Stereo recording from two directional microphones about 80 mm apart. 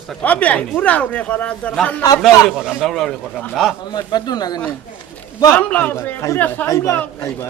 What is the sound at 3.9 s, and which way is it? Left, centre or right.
Speech, left.